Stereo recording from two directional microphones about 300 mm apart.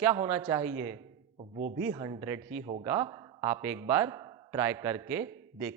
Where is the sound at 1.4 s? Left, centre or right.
Right.